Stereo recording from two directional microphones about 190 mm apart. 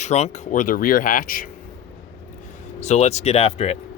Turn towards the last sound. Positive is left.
turn(degrees=35)  # may be behind; listen again after turning